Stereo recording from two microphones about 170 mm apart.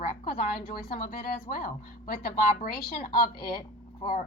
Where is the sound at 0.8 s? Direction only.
60° left (ahead or behind).